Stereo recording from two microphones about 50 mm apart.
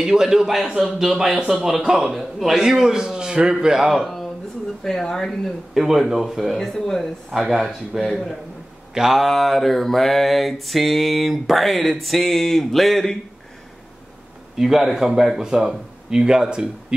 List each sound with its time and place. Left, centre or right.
0.0 s speech: centre
1.3 s speech: right
1.6 s speech: centre
3.6 s mantra: centre
5.8 s mantra: centre
14.6 s speech: centre